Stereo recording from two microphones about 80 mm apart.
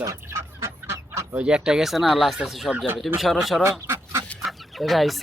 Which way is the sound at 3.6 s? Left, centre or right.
Right.